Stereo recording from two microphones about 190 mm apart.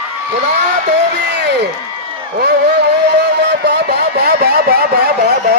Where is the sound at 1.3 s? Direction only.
60° right (ahead or behind).